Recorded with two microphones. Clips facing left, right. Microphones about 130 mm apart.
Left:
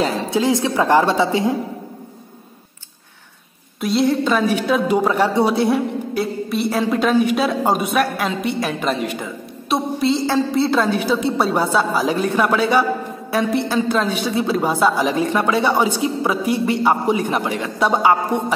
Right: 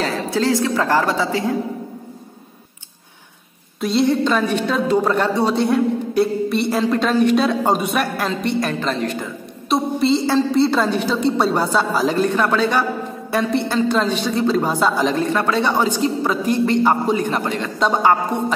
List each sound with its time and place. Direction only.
0.0 s a woman's voice: 20° left (ahead or behind)
3.8 s a woman's voice: centre (ahead or behind)
9.7 s a woman's voice: centre (ahead or behind)